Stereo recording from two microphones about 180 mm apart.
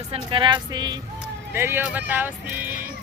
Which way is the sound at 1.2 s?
15° right (ahead or behind).